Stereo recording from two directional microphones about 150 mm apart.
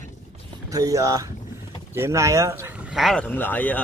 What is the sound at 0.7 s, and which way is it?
Speech, 20° right (ahead or behind).